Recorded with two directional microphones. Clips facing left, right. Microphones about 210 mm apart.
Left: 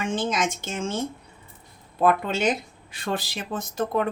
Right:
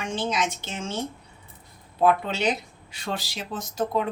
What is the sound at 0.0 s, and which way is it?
Speech, 50° left (ahead or behind).